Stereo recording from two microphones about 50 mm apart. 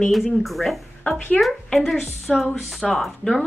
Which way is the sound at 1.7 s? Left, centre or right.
Centre.